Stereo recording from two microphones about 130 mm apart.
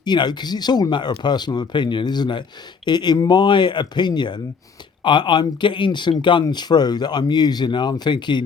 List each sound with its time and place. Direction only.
0.0 s speech: 35° left (ahead or behind)